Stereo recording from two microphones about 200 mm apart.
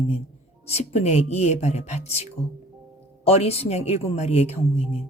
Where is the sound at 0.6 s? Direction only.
30° left (ahead or behind).